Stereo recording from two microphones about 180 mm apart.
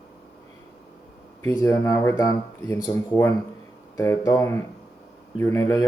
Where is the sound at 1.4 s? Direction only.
20° left (ahead or behind).